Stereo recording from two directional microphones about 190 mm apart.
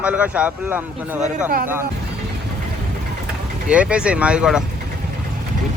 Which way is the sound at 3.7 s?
5° right (ahead or behind).